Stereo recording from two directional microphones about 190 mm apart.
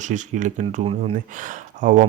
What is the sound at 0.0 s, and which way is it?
Speech, 40° right (ahead or behind).